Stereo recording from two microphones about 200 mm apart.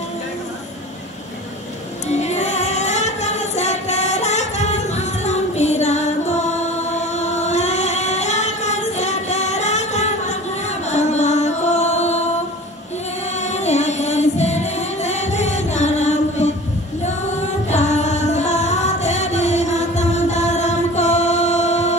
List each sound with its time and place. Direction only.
2.0 s singing: 35° left (ahead or behind)
10.9 s music: 35° left (ahead or behind)
13.4 s music: 35° left (ahead or behind)
17.6 s music: 35° left (ahead or behind)